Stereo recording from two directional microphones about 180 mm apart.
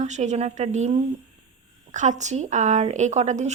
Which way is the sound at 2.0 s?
40° right (ahead or behind).